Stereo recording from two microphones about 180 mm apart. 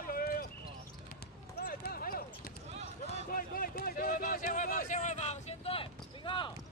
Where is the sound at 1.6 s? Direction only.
55° left (ahead or behind).